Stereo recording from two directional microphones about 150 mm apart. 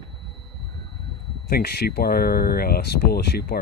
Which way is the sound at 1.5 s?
90° left.